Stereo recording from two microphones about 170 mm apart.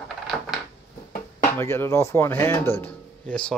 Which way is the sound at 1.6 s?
15° left (ahead or behind).